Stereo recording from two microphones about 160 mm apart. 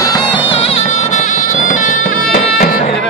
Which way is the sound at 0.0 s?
25° left (ahead or behind).